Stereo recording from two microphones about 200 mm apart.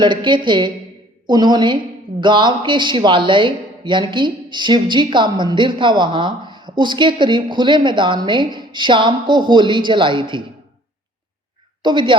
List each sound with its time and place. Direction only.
0.0 s speech: 25° right (ahead or behind)
11.8 s speech: 25° right (ahead or behind)